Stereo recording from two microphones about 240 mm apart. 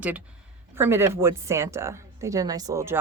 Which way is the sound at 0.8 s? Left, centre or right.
Centre.